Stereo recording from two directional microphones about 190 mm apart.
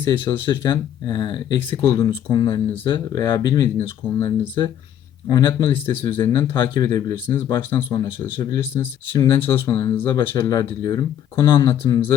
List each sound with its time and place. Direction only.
0.1 s speech: 25° left (ahead or behind)